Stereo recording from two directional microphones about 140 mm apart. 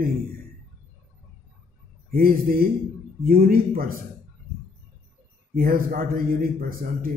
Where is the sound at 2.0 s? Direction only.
90° right.